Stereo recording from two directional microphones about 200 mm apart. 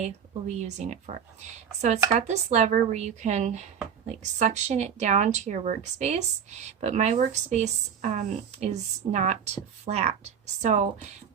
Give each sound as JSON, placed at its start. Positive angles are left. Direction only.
{"t": 0.0, "sound": "speech", "side_deg": -35}